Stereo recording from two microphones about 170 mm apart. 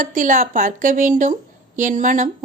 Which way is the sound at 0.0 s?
50° right (ahead or behind).